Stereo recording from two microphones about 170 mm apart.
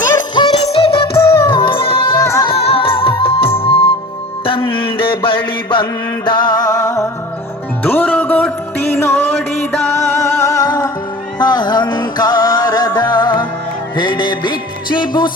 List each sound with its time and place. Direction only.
0.3 s music: 30° left (ahead or behind)
1.1 s music of bollywood: 15° left (ahead or behind)
1.5 s music: 30° left (ahead or behind)
2.2 s music: 15° left (ahead or behind)
2.5 s music: 35° left (ahead or behind)